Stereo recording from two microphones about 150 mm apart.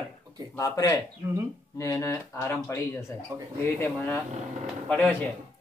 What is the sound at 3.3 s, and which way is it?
Speech, 20° right (ahead or behind).